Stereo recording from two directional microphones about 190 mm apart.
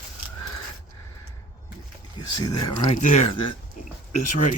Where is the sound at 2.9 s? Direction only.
40° left (ahead or behind).